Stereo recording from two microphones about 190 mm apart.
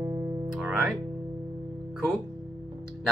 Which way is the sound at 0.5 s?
5° right (ahead or behind).